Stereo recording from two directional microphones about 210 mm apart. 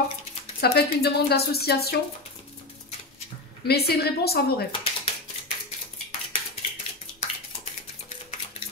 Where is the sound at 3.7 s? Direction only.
50° left (ahead or behind).